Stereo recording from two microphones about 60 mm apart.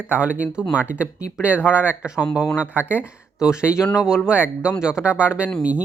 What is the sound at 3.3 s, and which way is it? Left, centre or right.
Speech, centre.